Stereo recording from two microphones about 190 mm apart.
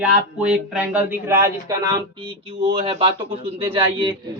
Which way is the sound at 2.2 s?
30° right (ahead or behind).